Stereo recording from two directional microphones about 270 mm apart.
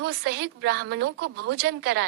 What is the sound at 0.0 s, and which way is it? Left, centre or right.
A woman's voice, right.